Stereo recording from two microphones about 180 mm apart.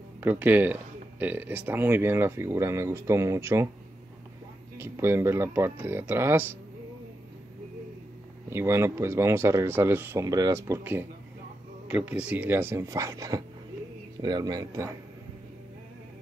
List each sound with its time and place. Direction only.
0.2 s speech: 10° right (ahead or behind)
4.7 s speech: 15° right (ahead or behind)
8.5 s speech: 15° right (ahead or behind)